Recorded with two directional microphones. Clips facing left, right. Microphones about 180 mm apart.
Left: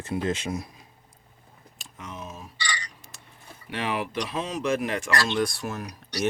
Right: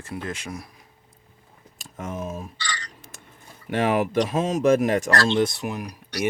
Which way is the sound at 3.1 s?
50° right (ahead or behind).